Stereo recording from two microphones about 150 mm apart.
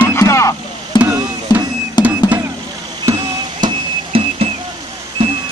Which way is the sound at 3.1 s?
30° right (ahead or behind).